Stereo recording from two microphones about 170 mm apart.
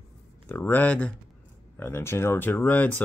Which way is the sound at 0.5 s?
10° left (ahead or behind).